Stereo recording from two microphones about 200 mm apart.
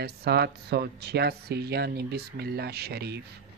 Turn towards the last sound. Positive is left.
turn(degrees=-55)  # may be behind; listen again after turning